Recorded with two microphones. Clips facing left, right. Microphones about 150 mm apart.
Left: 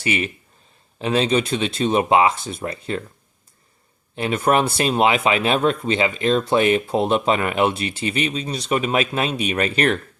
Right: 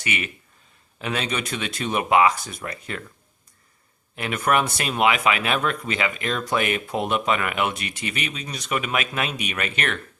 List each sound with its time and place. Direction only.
0.0 s speech: 30° left (ahead or behind)
4.1 s speech: 30° left (ahead or behind)